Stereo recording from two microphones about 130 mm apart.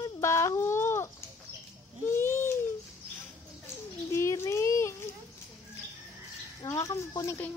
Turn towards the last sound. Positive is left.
turn(degrees=20)  # may be behind; listen again after turning